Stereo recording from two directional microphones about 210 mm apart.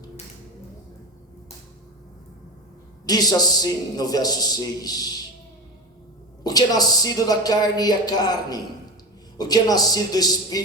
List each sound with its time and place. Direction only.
3.1 s a woman's voice: 20° left (ahead or behind)
6.4 s a woman's voice: 20° left (ahead or behind)